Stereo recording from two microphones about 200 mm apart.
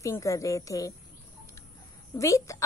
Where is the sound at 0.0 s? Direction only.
15° left (ahead or behind).